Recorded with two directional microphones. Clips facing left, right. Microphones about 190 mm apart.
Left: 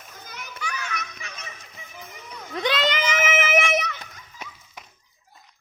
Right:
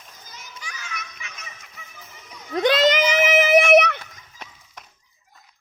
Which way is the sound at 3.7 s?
65° right (ahead or behind).